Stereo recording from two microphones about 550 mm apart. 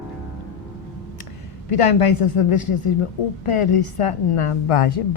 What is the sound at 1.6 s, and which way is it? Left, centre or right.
A woman's voice, left.